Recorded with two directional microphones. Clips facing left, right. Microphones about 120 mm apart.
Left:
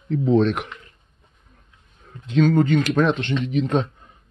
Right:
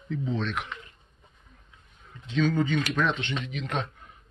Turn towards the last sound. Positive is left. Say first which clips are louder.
# left 11 dB
turn(degrees=40)  # may be behind; listen again after turning